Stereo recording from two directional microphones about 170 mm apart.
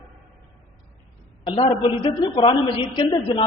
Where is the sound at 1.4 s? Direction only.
30° left (ahead or behind).